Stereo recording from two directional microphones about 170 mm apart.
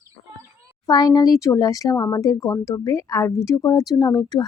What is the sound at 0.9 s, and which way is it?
Speech, 25° left (ahead or behind).